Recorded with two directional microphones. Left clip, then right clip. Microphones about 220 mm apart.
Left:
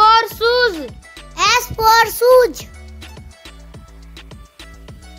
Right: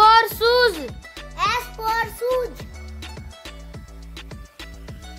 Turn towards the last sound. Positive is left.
turn(degrees=0)  # may be behind; listen again after turning